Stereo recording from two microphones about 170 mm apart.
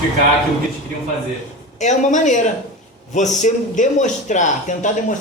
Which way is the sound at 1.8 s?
45° left (ahead or behind).